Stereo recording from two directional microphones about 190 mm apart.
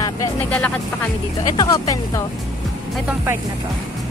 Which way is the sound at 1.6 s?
20° left (ahead or behind).